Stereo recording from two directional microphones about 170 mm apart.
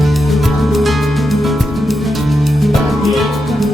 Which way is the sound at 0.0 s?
Centre (ahead or behind).